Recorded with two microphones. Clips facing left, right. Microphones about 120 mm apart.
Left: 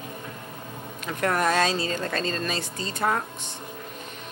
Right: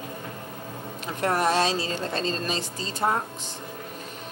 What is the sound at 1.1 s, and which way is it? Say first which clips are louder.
A woman's voice: even; 30° right (ahead or behind).